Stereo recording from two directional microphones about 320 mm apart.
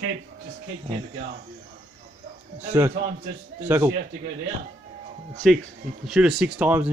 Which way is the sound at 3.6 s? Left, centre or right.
Centre.